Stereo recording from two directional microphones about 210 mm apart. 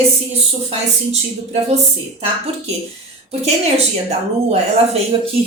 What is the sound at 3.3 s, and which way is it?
A woman's voice, 30° right (ahead or behind).